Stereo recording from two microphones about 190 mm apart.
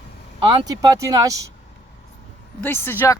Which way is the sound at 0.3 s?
25° right (ahead or behind).